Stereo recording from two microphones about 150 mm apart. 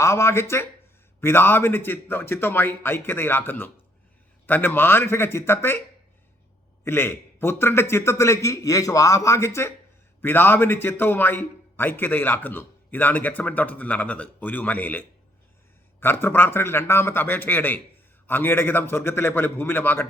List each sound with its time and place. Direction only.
0.0 s a man's voice: 20° left (ahead or behind)
6.8 s a man's voice: 15° left (ahead or behind)